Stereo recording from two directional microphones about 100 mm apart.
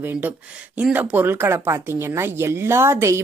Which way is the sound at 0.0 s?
20° right (ahead or behind).